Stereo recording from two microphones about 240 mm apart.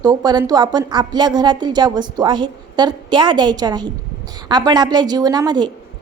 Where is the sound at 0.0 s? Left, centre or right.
Centre.